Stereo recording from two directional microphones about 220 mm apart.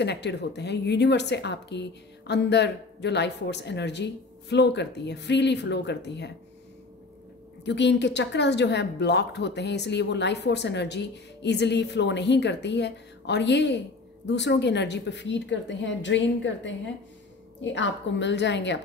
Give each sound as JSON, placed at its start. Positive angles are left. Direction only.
{"t": 0.0, "sound": "speech", "side_deg": 50}
{"t": 7.6, "sound": "speech", "side_deg": 50}